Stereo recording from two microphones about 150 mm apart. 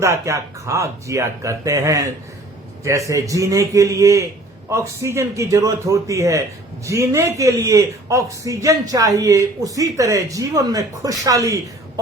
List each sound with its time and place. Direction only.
0.0 s a man's voice: 20° right (ahead or behind)